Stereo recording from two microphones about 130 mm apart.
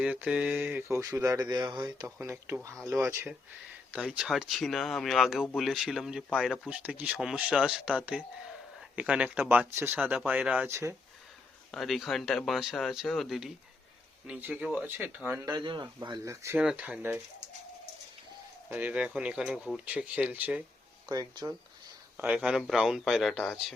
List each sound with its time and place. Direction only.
0.0 s speech: 10° right (ahead or behind); by 1.9 s 35° right (ahead or behind)
2.0 s speech: 15° right (ahead or behind)
3.9 s speech: 5° right (ahead or behind)
11.7 s speech: centre (ahead or behind); by 15.5 s 15° right (ahead or behind)
15.5 s speech: 35° right (ahead or behind)
16.3 s speech: 20° right (ahead or behind)
18.7 s speech: 15° right (ahead or behind)
21.1 s speech: 30° right (ahead or behind)
22.2 s speech: 5° right (ahead or behind)